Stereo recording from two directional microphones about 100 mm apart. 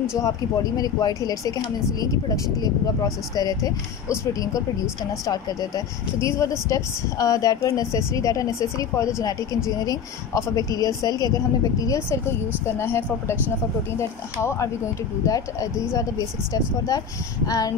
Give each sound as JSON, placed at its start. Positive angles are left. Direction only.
{"t": 0.2, "sound": "a woman's voice", "side_deg": 40}
{"t": 6.1, "sound": "a woman's voice", "side_deg": 30}
{"t": 12.6, "sound": "a woman's voice", "side_deg": 25}